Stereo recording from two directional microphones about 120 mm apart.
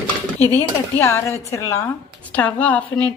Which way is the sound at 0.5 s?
20° left (ahead or behind).